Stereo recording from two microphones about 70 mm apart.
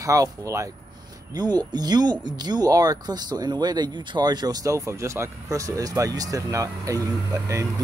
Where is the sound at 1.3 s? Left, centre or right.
Right.